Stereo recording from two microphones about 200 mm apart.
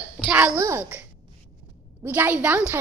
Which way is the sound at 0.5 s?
15° right (ahead or behind).